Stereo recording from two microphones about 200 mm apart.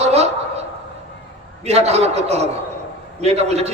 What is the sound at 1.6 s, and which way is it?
A man's voice, 30° right (ahead or behind).